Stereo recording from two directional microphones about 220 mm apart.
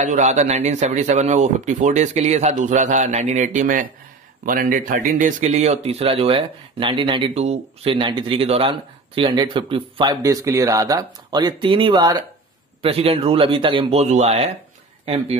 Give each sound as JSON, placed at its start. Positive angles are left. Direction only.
{"t": 0.0, "sound": "speech", "side_deg": -30}